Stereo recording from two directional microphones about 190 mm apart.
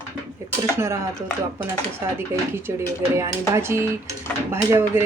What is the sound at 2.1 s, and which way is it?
Speech, 15° right (ahead or behind).